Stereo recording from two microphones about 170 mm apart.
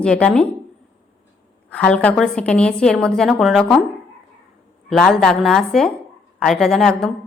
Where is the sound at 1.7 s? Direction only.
5° left (ahead or behind).